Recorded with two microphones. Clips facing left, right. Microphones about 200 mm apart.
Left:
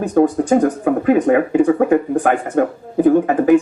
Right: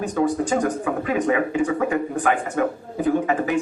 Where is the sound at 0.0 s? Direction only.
55° left (ahead or behind).